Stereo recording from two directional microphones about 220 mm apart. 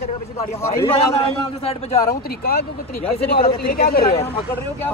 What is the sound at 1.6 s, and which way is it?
Speech, 30° left (ahead or behind).